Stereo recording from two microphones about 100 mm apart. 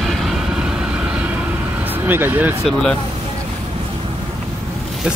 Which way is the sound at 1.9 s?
20° right (ahead or behind).